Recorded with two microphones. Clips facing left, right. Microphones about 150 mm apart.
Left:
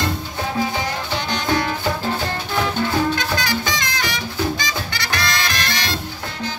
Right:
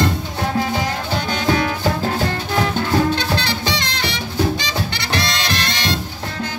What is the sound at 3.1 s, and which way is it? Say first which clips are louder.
Music: right 1 dB; 30° right (ahead or behind).